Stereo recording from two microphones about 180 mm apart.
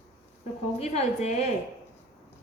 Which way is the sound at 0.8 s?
35° left (ahead or behind).